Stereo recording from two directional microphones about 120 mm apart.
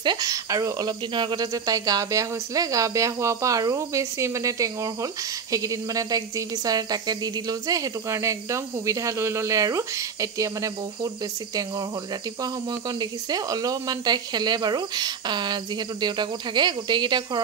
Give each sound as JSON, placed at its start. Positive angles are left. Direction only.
{"t": 0.0, "sound": "speech", "side_deg": -35}
{"t": 12.4, "sound": "speech", "side_deg": -35}